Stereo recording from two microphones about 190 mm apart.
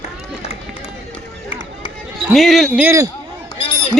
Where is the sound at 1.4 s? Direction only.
20° left (ahead or behind).